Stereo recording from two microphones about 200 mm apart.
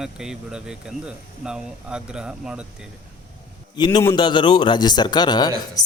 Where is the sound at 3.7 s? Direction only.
20° left (ahead or behind).